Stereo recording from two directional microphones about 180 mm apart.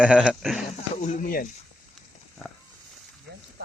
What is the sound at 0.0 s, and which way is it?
Speech, 5° right (ahead or behind).